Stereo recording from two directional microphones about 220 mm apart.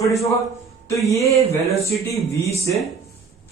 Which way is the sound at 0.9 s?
15° left (ahead or behind).